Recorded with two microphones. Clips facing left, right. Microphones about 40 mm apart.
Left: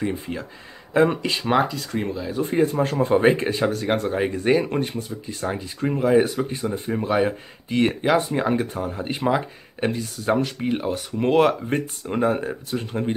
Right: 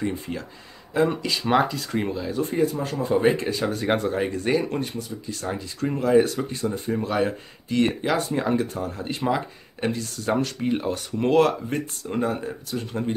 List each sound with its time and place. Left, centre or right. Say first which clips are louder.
0.0 s speech: left 2 dB; centre
1.0 s speech: even; left
1.5 s speech: even; centre
2.5 s speech: left 6 dB; left
3.7 s speech: even; centre
4.1 s speech: left 3 dB; centre
11.2 s speech: left 1 dB; left